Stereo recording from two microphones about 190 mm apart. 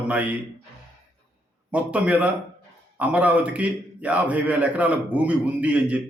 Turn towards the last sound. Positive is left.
turn(degrees=-5)  # may be behind; listen again after turning